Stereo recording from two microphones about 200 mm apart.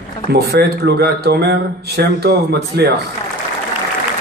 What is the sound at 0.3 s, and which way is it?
Speech, 55° right (ahead or behind).